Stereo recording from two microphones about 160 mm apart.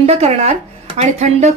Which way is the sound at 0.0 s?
40° right (ahead or behind).